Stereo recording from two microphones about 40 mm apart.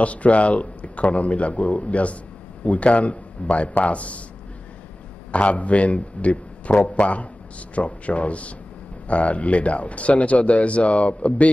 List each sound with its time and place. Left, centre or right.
0.0 s a man's voice: left
5.3 s speech: left